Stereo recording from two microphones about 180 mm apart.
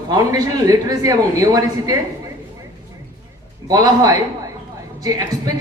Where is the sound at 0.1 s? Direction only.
20° right (ahead or behind).